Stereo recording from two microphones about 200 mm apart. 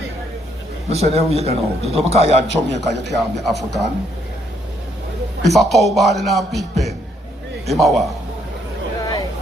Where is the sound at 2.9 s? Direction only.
Centre (ahead or behind).